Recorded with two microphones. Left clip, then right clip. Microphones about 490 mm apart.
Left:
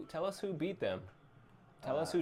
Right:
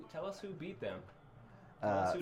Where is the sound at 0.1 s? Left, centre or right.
Left.